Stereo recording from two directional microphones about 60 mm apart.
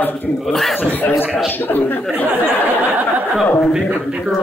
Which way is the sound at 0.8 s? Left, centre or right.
Left.